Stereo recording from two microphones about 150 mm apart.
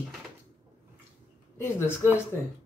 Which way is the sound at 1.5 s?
15° left (ahead or behind).